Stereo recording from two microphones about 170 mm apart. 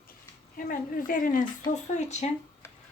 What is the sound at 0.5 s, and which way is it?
Speech, 55° left (ahead or behind).